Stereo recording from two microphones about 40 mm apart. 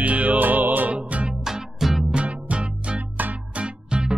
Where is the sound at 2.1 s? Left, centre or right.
Right.